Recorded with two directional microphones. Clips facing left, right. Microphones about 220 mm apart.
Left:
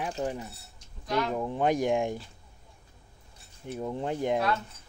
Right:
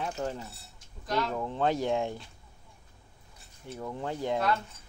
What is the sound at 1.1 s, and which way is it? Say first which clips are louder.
Speech: left 2 dB; centre (ahead or behind).